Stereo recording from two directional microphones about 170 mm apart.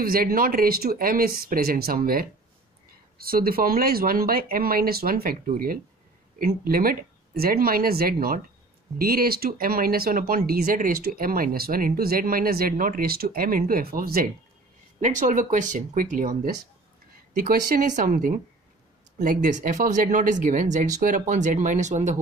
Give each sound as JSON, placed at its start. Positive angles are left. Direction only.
{"t": 0.0, "sound": "speech", "side_deg": -60}
{"t": 15.0, "sound": "speech", "side_deg": -45}